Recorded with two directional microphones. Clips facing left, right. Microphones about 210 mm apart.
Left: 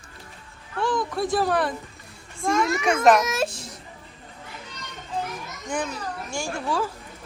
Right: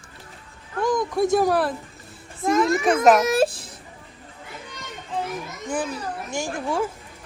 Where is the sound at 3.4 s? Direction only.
55° right (ahead or behind).